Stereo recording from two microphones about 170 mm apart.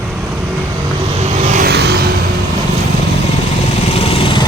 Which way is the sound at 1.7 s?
75° right (ahead or behind).